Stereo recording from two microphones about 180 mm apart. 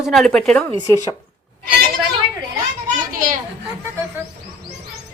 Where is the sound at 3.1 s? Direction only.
50° right (ahead or behind).